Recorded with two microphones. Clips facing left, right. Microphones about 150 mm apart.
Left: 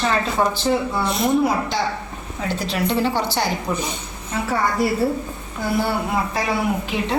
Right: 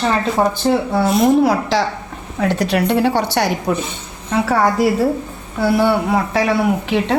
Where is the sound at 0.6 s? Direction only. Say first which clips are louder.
Right 5 dB; 75° right (ahead or behind).